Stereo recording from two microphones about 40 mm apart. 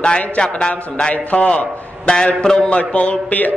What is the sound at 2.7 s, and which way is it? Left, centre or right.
Mantra, left.